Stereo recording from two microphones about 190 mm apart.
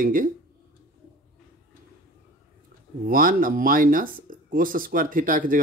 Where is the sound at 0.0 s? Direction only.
45° right (ahead or behind).